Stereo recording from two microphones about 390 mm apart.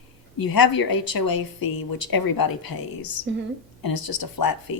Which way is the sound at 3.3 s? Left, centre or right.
Right.